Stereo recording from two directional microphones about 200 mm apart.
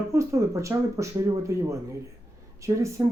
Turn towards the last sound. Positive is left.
turn(degrees=-15)  # may be behind; listen again after turning